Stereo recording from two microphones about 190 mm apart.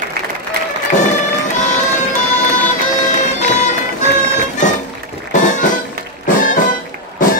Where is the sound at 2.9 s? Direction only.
40° left (ahead or behind).